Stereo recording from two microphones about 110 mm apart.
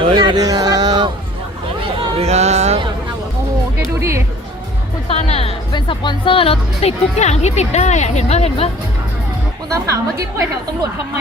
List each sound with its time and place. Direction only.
0.0 s speech: 50° right (ahead or behind)
0.3 s a sound: 35° right (ahead or behind)
2.1 s a sound: 75° right (ahead or behind)
5.0 s speech: 65° left (ahead or behind)
5.7 s speech: 45° left (ahead or behind); by 8.7 s 65° left (ahead or behind)
9.7 s a woman's voice: 30° right (ahead or behind)